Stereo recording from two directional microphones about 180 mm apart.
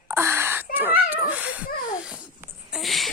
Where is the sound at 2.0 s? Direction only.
5° right (ahead or behind).